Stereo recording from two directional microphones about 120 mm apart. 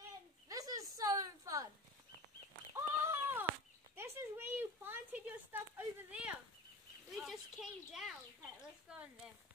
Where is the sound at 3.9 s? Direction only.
20° right (ahead or behind).